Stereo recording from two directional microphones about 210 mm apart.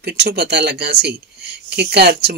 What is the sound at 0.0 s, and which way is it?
Speech, 50° right (ahead or behind).